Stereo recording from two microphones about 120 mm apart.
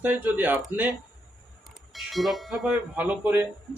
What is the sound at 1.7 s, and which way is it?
Speech, centre (ahead or behind).